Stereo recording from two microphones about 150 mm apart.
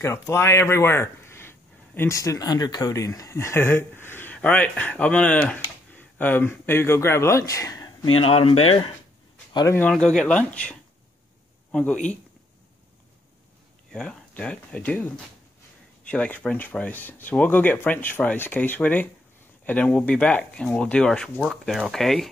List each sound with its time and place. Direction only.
0.0 s speech: 20° left (ahead or behind)
8.2 s speech: 40° left (ahead or behind)
9.7 s speech: 10° left (ahead or behind)
13.9 s speech: 5° left (ahead or behind)